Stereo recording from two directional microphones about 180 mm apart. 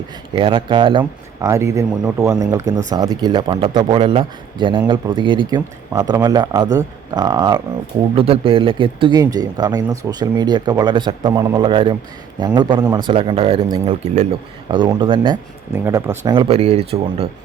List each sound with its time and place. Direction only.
0.3 s speech: 30° right (ahead or behind)
8.1 s speech: 30° right (ahead or behind)
15.7 s speech: 15° right (ahead or behind); by 17.2 s 35° right (ahead or behind)